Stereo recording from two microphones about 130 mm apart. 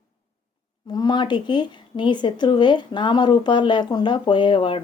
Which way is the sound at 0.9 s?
35° left (ahead or behind).